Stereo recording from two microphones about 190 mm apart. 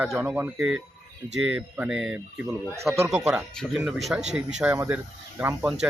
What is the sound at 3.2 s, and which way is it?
Speech, centre (ahead or behind).